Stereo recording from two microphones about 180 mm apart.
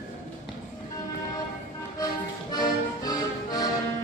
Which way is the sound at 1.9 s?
20° left (ahead or behind).